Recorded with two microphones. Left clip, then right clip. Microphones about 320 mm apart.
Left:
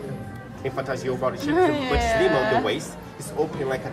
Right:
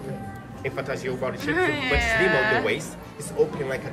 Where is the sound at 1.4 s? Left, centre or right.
Centre.